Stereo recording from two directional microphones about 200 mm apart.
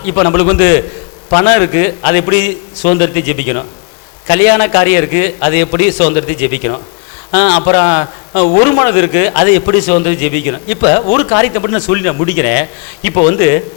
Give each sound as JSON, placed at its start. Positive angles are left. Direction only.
{"t": 0.0, "sound": "a man's voice", "side_deg": 15}